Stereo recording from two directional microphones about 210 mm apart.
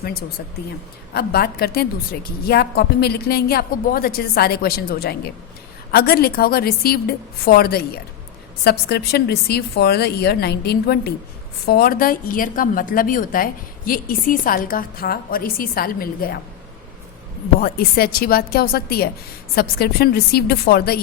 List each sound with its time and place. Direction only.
1.1 s a woman's voice: 50° left (ahead or behind)
17.6 s a woman's voice: 45° left (ahead or behind)